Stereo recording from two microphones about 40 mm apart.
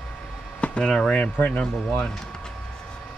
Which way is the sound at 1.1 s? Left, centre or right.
Left.